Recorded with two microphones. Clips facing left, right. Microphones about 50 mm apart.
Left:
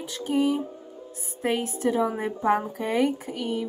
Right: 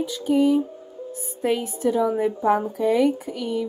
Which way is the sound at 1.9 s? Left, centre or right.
Left.